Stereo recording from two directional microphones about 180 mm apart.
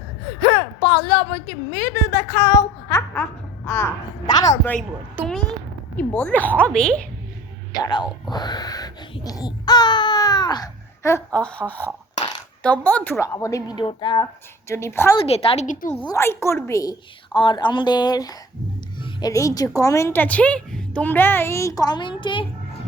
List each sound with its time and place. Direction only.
0.4 s gasp: 25° left (ahead or behind)
1.7 s a woman's voice: 15° left (ahead or behind)
4.6 s a woman's voice: 10° left (ahead or behind)
5.3 s a sound: centre (ahead or behind)
6.0 s a woman's voice: 5° left (ahead or behind)
7.7 s speech: 25° left (ahead or behind)
8.3 s baby cry: 25° left (ahead or behind)
11.3 s a woman's voice: 5° left (ahead or behind)
15.3 s a woman's voice: 35° left (ahead or behind)
16.0 s a woman's voice: 15° left (ahead or behind)
17.3 s a woman's voice: 25° left (ahead or behind)